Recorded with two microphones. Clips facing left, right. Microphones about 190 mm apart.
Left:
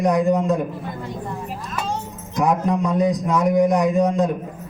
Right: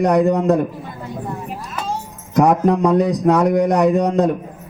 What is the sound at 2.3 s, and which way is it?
A man's voice, 65° right (ahead or behind).